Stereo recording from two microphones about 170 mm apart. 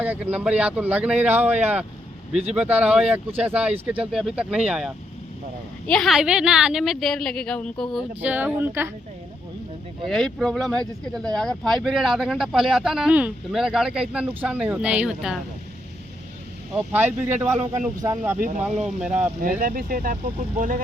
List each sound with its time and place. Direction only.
0.0 s speech: 10° right (ahead or behind)
8.2 s speech: 10° right (ahead or behind)
10.1 s speech: centre (ahead or behind)
16.7 s speech: 10° right (ahead or behind)
18.4 s speech: 45° right (ahead or behind)
18.9 s speech: 5° right (ahead or behind)
19.4 s speech: 55° right (ahead or behind)